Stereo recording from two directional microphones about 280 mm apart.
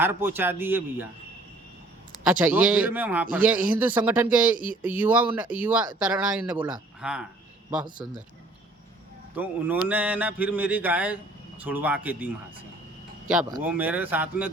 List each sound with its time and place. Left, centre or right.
0.0 s speech: centre
2.2 s speech: centre
9.3 s speech: centre